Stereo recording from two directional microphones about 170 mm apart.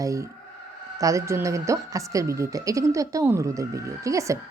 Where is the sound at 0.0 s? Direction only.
20° right (ahead or behind).